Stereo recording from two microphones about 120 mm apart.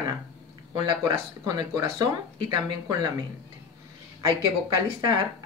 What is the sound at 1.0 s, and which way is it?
Speech, 35° right (ahead or behind).